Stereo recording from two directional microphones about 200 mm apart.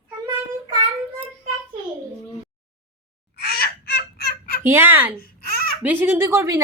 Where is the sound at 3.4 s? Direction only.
50° left (ahead or behind).